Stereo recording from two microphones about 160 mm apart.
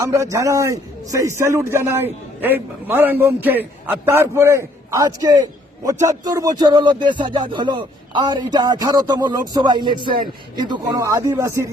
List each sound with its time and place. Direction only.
0.0 s a man's voice: 20° right (ahead or behind)